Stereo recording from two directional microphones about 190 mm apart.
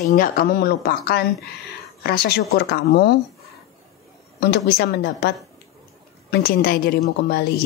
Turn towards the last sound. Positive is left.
turn(degrees=60)  # may be behind; listen again after turning